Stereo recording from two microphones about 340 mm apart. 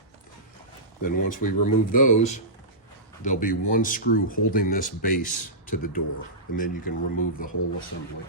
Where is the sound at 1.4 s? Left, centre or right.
Left.